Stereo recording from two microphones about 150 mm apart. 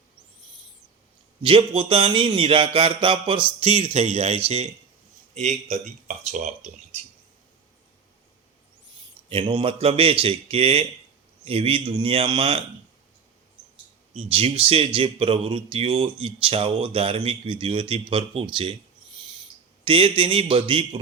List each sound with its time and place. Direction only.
1.4 s speech: 35° right (ahead or behind)
9.3 s speech: 35° right (ahead or behind)
14.3 s speech: 40° right (ahead or behind)
19.8 s speech: 35° right (ahead or behind)